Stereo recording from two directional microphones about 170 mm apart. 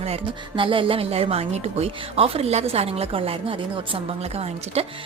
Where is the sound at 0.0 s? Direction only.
35° right (ahead or behind).